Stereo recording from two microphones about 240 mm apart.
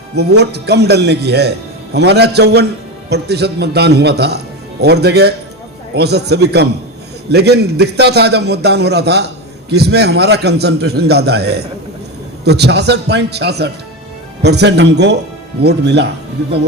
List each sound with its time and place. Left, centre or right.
0.2 s a man's voice: right